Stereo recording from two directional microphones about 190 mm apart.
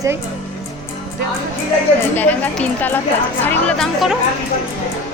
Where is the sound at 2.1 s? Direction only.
10° left (ahead or behind).